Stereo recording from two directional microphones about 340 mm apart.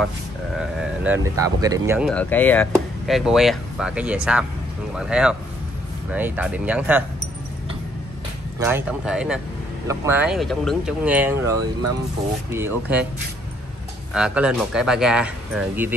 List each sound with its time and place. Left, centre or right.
0.6 s speech: centre
8.5 s speech: centre
14.1 s speech: centre